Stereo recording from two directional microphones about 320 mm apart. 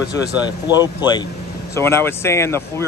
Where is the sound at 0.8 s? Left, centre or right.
Centre.